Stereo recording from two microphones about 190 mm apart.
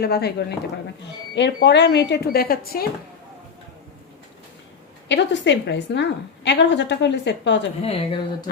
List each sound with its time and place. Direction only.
0.0 s a woman's voice: 55° left (ahead or behind)
5.0 s a woman's voice: 70° left (ahead or behind)
7.8 s speech: 30° left (ahead or behind)